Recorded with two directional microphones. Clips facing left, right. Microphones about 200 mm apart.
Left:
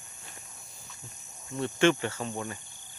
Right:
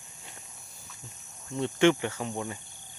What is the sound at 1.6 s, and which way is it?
Speech, 15° right (ahead or behind).